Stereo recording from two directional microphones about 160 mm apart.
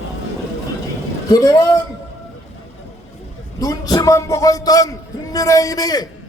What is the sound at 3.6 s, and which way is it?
A man's voice, 20° left (ahead or behind).